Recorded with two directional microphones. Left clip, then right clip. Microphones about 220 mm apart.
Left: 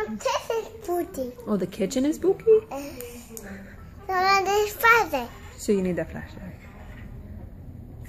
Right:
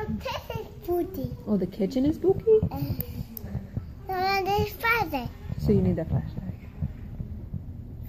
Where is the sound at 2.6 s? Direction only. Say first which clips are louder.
Left 1 dB; 15° left (ahead or behind).